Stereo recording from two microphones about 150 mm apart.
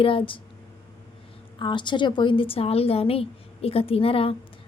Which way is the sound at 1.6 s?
30° left (ahead or behind).